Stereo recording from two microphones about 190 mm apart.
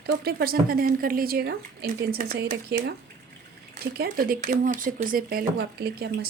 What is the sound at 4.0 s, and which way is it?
Speech, 50° right (ahead or behind).